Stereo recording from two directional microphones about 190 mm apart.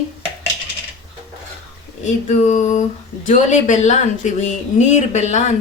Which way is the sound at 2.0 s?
40° left (ahead or behind).